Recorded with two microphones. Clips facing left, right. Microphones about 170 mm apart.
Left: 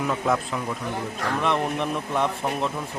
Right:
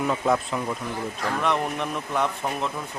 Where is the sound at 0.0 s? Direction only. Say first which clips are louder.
Right 1 dB; centre (ahead or behind).